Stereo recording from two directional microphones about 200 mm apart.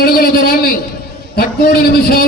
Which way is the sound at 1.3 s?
50° left (ahead or behind).